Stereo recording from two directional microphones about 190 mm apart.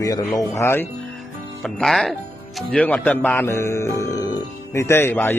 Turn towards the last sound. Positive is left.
turn(degrees=10)  # may be behind; listen again after turning